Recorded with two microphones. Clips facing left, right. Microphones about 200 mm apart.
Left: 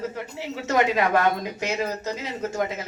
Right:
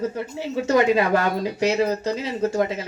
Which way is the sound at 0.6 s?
30° right (ahead or behind).